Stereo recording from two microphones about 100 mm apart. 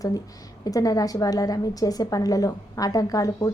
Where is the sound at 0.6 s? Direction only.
35° left (ahead or behind).